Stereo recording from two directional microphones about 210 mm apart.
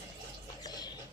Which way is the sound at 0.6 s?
20° left (ahead or behind).